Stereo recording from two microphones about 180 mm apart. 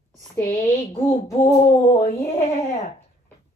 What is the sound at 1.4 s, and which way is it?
Speech, 40° left (ahead or behind).